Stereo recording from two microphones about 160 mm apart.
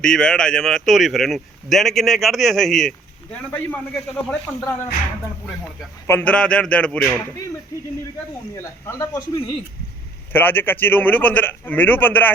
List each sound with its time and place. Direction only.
0.0 s a man's voice: 5° left (ahead or behind)
6.1 s a man's voice: 10° left (ahead or behind)
8.5 s a man's voice: 20° left (ahead or behind)
10.3 s a man's voice: 10° left (ahead or behind)